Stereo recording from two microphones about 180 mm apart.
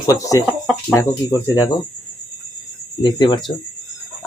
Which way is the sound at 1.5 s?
20° left (ahead or behind).